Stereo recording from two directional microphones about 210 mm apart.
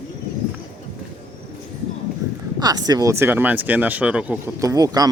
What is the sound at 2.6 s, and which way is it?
Speech, 20° right (ahead or behind).